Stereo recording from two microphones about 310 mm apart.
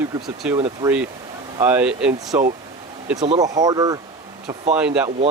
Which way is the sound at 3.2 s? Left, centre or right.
Centre.